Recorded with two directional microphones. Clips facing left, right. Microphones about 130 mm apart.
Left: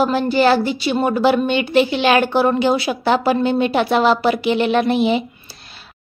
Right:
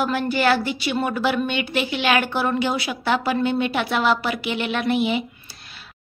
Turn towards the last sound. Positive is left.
turn(degrees=35)  # may be behind; listen again after turning